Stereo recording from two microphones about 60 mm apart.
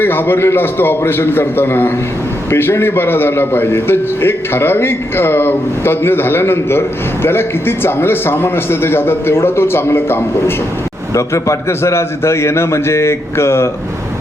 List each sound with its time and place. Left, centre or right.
0.0 s a man's voice: left
11.1 s a man's voice: left